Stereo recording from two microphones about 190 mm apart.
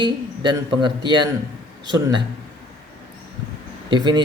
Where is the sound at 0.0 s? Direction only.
25° right (ahead or behind).